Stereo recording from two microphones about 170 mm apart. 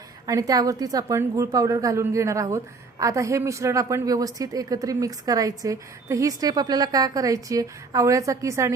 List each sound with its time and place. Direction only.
0.3 s a woman's voice: 20° right (ahead or behind)